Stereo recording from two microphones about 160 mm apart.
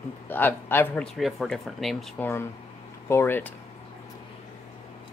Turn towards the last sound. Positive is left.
turn(degrees=15)  # may be behind; listen again after turning